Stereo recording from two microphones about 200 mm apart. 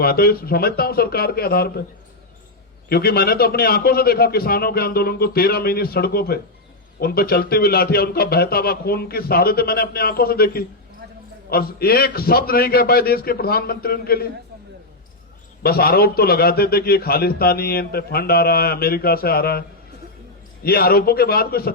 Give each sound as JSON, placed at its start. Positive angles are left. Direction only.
{"t": 0.0, "sound": "a man's voice", "side_deg": 50}
{"t": 2.9, "sound": "a man's voice", "side_deg": 50}
{"t": 15.6, "sound": "a man's voice", "side_deg": 50}
{"t": 20.7, "sound": "a man's voice", "side_deg": 50}